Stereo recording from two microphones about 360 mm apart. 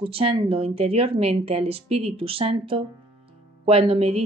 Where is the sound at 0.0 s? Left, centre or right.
Centre.